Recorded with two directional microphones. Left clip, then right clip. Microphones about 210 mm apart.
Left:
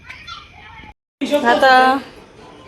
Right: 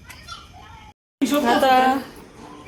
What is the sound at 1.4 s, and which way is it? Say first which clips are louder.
Speech: left 5 dB; centre (ahead or behind).